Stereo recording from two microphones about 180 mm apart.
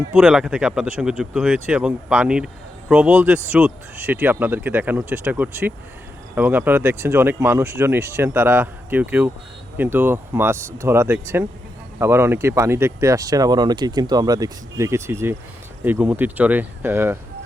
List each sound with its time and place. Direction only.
0.1 s speech: 5° right (ahead or behind)